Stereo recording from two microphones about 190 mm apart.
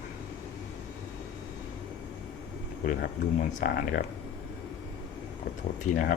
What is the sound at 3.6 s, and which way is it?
Speech, 55° left (ahead or behind).